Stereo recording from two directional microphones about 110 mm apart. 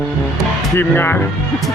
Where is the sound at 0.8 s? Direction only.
20° left (ahead or behind).